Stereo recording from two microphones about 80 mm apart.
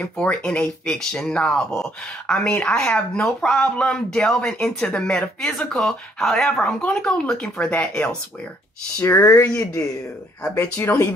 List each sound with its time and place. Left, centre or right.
0.2 s speech: centre
9.2 s speech: left